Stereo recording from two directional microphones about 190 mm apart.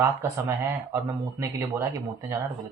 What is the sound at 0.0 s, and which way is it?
Speech, 15° right (ahead or behind).